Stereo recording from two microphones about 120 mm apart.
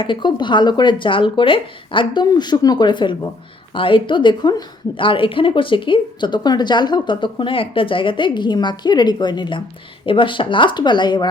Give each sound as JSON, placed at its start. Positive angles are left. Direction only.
{"t": 0.0, "sound": "a woman's voice", "side_deg": 40}
{"t": 2.2, "sound": "a woman's voice", "side_deg": 35}